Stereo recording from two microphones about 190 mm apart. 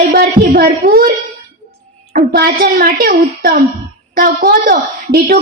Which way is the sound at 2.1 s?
55° right (ahead or behind).